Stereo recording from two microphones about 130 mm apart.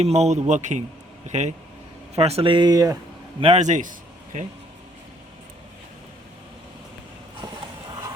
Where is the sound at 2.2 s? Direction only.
50° right (ahead or behind); by 2.9 s 30° right (ahead or behind).